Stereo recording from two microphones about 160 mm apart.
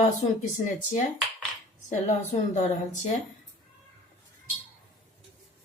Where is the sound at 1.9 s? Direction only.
45° left (ahead or behind).